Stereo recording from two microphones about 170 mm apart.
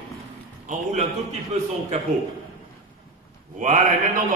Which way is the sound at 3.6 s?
50° right (ahead or behind).